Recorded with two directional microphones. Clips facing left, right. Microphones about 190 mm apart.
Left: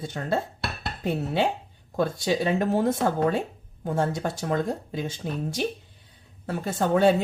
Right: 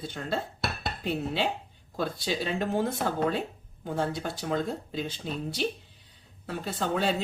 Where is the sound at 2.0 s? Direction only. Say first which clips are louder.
Left 6 dB; 50° left (ahead or behind).